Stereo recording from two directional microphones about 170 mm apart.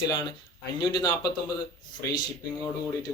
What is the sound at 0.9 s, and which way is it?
Speech, 25° left (ahead or behind).